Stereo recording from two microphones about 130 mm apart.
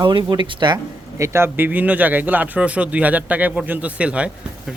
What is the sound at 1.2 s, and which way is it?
Speech, 20° right (ahead or behind).